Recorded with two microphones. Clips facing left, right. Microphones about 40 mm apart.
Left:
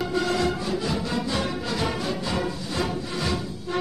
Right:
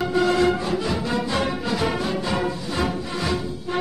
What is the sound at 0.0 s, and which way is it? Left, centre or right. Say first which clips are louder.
Music: right 5 dB; right.